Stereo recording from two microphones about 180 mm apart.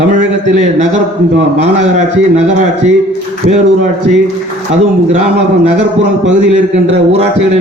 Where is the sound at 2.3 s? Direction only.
40° right (ahead or behind).